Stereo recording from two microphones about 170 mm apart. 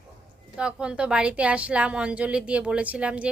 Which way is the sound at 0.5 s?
5° right (ahead or behind).